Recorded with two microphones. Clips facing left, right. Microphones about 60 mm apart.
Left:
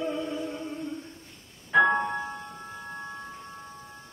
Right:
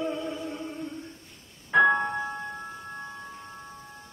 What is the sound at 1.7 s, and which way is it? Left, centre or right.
Keyboard, centre.